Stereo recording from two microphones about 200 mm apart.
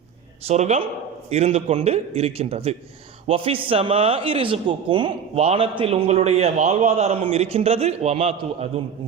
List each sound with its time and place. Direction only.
0.4 s a man's voice: 35° right (ahead or behind)